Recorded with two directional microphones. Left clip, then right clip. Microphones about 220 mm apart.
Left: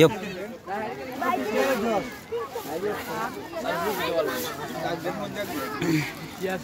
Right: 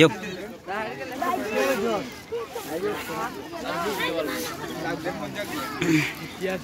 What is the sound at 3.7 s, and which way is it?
Speech, 35° left (ahead or behind).